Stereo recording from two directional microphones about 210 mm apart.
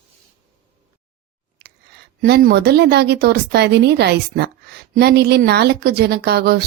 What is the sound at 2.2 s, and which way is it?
A woman's voice, 50° right (ahead or behind).